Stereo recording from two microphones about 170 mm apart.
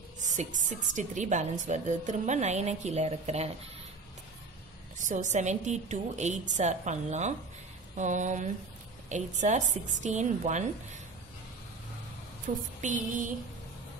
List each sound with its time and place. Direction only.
0.2 s a woman's voice: 45° right (ahead or behind)
5.0 s a woman's voice: 45° right (ahead or behind)
12.5 s a woman's voice: 45° right (ahead or behind)